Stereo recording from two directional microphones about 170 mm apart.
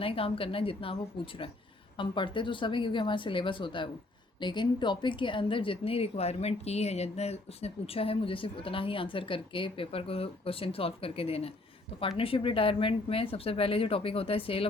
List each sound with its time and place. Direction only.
0.0 s a woman's voice: 35° left (ahead or behind)